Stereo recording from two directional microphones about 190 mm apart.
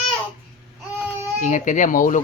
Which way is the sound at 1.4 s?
40° left (ahead or behind).